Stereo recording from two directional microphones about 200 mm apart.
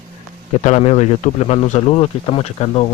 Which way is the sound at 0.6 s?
35° left (ahead or behind).